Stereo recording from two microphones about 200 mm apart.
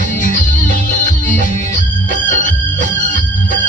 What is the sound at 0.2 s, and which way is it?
Music, 40° left (ahead or behind).